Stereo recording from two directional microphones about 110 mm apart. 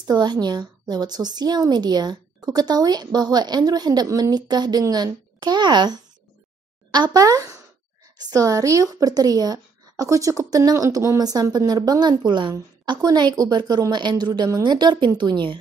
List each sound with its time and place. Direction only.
0.0 s speech: 40° right (ahead or behind)